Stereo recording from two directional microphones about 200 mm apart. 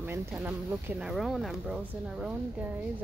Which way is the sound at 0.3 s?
10° right (ahead or behind).